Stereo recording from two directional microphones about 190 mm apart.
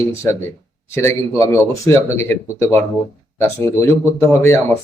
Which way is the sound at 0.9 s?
15° left (ahead or behind).